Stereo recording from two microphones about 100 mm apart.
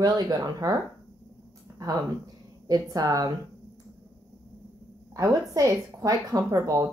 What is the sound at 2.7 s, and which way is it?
Speech, 40° right (ahead or behind).